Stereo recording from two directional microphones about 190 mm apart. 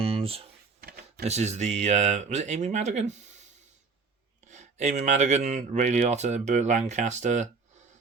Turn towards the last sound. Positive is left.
turn(degrees=-40)  # may be behind; listen again after turning